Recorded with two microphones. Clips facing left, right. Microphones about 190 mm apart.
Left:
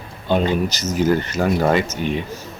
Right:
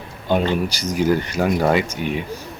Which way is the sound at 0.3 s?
10° right (ahead or behind).